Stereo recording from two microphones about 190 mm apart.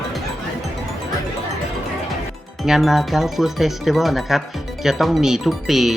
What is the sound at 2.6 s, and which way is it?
Speech, centre (ahead or behind).